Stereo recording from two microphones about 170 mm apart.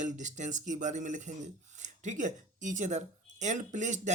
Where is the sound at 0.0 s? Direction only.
45° right (ahead or behind).